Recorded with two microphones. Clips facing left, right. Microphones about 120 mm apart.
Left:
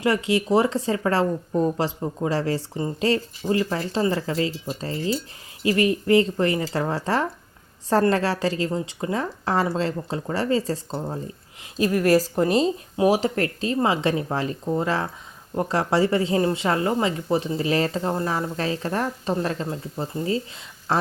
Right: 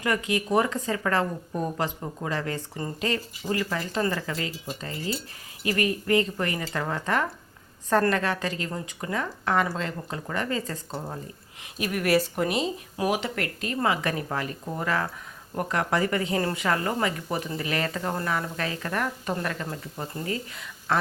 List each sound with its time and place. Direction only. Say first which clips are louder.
0.0 s a woman's voice: left 5 dB; 30° left (ahead or behind)